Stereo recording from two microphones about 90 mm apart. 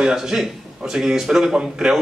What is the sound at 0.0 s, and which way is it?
A man's voice, 5° right (ahead or behind).